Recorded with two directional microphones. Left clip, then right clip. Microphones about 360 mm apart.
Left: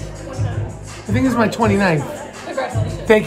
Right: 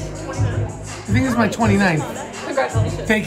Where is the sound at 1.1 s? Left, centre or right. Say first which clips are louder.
Left 2 dB; centre.